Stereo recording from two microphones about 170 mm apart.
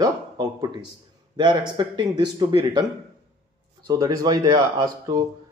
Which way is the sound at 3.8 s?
25° right (ahead or behind).